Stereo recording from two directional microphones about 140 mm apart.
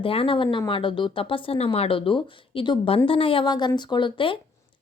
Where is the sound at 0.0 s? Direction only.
40° left (ahead or behind).